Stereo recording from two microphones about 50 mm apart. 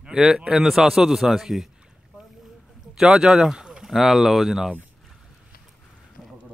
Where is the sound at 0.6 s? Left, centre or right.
Centre.